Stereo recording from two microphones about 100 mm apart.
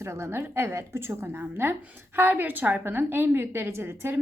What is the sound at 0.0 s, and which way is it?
A woman's voice, 25° right (ahead or behind).